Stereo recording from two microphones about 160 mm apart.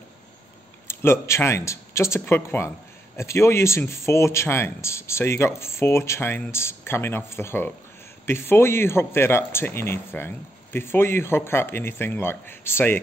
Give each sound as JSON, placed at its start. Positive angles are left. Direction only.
{"t": 0.8, "sound": "speech", "side_deg": 15}